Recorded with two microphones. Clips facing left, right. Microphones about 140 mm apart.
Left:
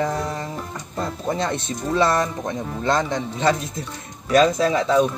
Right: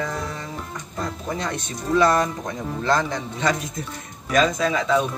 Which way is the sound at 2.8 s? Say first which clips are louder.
Left 1 dB; 25° left (ahead or behind).